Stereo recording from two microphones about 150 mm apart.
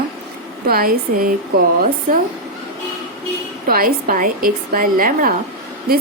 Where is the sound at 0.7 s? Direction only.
80° right.